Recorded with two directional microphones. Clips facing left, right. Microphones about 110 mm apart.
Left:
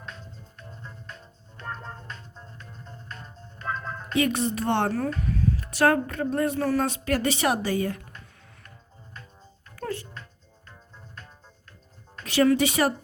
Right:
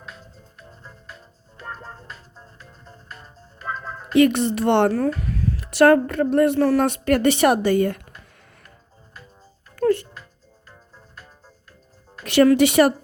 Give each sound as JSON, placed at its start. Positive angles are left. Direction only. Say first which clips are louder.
{"t": 0.0, "sound": "music", "louder": "even", "side_deg": -5}
{"t": 4.2, "sound": "speech", "louder": "right 8 dB", "side_deg": -70}
{"t": 9.7, "sound": "music", "louder": "right 13 dB", "side_deg": -65}
{"t": 10.7, "sound": "music", "louder": "even", "side_deg": -5}
{"t": 12.2, "sound": "speech", "louder": "right 6 dB", "side_deg": -65}